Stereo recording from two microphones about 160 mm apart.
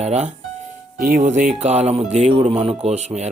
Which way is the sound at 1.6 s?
45° right (ahead or behind).